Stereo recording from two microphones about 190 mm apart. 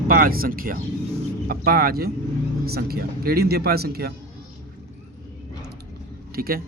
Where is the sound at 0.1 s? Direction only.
50° right (ahead or behind).